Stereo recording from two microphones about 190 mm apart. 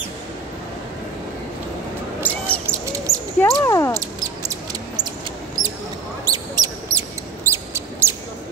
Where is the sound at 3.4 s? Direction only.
15° left (ahead or behind).